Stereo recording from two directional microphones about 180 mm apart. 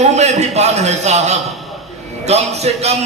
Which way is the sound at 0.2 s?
40° right (ahead or behind).